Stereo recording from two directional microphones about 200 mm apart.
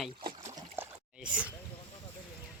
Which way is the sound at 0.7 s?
10° right (ahead or behind).